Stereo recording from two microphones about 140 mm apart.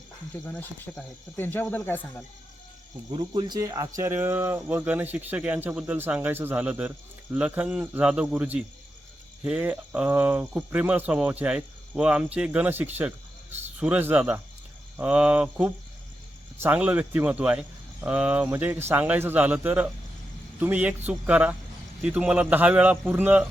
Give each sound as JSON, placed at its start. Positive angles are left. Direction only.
{"t": 0.4, "sound": "speech", "side_deg": 5}
{"t": 3.1, "sound": "speech", "side_deg": -30}